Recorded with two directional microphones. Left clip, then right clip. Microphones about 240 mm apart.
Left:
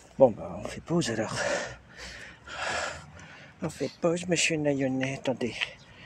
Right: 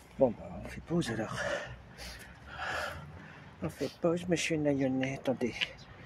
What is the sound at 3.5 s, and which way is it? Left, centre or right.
Speech, left.